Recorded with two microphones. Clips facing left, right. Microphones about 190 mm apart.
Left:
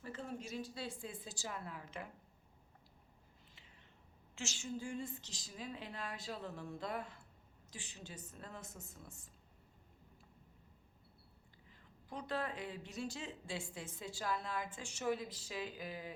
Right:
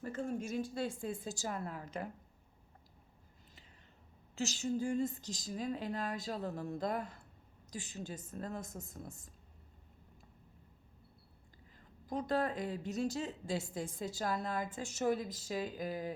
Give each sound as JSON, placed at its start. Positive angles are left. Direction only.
{"t": 0.0, "sound": "a woman's voice", "side_deg": -45}
{"t": 4.4, "sound": "a woman's voice", "side_deg": -40}
{"t": 11.8, "sound": "speech", "side_deg": -40}